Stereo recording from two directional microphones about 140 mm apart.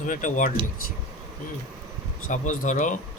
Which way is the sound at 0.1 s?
65° left (ahead or behind).